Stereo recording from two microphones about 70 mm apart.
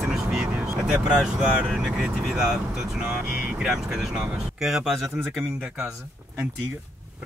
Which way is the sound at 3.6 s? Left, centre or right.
Centre.